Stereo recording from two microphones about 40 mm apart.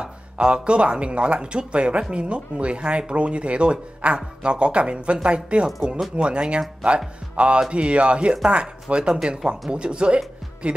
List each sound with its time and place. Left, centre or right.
0.0 s speech: right